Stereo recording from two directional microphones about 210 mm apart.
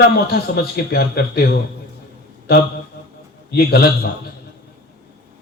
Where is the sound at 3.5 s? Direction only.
50° left (ahead or behind).